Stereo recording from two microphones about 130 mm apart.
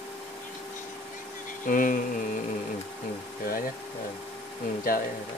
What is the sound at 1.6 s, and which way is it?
Speech, 90° left.